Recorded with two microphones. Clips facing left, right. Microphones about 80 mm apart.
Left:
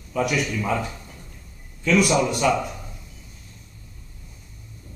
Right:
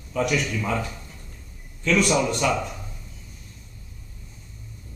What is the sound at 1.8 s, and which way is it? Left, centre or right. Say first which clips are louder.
Speech: left 2 dB; centre.